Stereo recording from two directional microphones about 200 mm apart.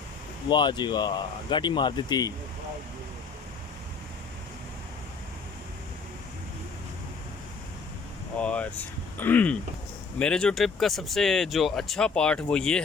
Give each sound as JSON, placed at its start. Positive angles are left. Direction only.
{"t": 0.4, "sound": "speech", "side_deg": 20}
{"t": 8.4, "sound": "speech", "side_deg": 5}